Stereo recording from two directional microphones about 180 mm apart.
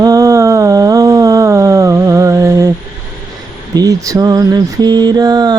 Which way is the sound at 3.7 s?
20° right (ahead or behind).